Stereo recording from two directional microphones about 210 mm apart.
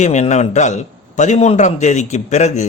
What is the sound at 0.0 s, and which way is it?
Speech, 35° left (ahead or behind).